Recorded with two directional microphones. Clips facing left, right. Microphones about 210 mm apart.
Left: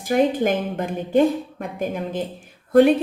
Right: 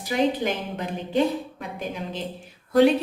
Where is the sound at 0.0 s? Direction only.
50° left (ahead or behind).